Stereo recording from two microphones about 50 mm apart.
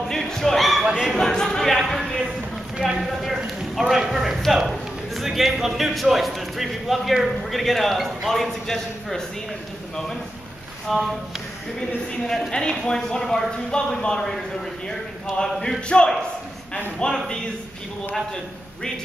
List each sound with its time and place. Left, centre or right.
0.1 s a sound: centre
0.8 s dog: centre
1.1 s a sound: centre
2.8 s a man's voice: centre
10.9 s a man's voice: centre
12.3 s speech: centre